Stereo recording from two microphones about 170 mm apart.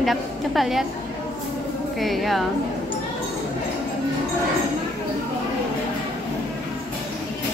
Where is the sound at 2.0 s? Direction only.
Centre (ahead or behind).